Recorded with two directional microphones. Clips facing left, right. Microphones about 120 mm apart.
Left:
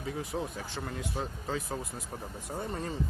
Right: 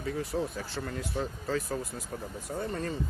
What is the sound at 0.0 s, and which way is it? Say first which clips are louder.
Speech: right 3 dB; 10° left (ahead or behind).